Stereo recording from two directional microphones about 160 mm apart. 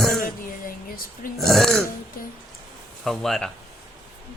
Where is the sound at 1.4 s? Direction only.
Centre (ahead or behind).